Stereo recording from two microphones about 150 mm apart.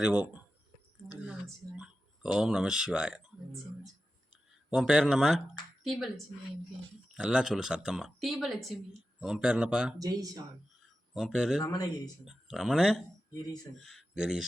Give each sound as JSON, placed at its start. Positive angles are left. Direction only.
{"t": 0.0, "sound": "speech", "side_deg": -10}
{"t": 4.7, "sound": "a woman's voice", "side_deg": -5}
{"t": 7.1, "sound": "a woman's voice", "side_deg": -5}
{"t": 10.0, "sound": "speech", "side_deg": -25}
{"t": 11.1, "sound": "a woman's voice", "side_deg": 0}
{"t": 11.6, "sound": "speech", "side_deg": 25}
{"t": 12.2, "sound": "a woman's voice", "side_deg": -5}